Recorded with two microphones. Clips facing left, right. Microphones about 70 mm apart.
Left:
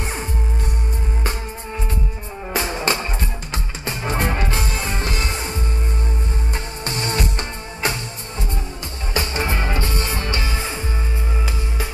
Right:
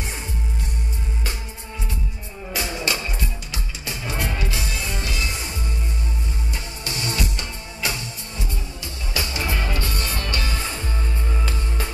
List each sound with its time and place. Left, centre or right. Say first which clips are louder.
2.5 s music: left 4 dB; left
9.1 s music: left 4 dB; left; by 11.9 s centre